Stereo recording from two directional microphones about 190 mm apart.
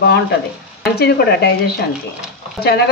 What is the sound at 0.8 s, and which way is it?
Speech, 55° left (ahead or behind).